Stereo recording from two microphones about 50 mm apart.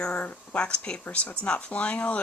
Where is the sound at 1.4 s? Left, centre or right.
Left.